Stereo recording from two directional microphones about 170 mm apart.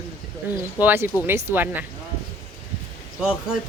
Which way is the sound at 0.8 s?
15° right (ahead or behind).